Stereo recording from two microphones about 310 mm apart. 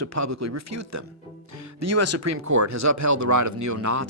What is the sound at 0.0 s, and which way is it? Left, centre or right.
Speech, right.